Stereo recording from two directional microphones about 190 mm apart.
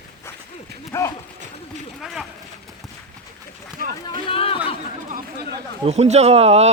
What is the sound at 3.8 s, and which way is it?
Speech, 45° right (ahead or behind).